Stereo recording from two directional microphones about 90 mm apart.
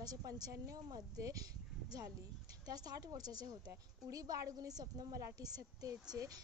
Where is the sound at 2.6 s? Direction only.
45° right (ahead or behind).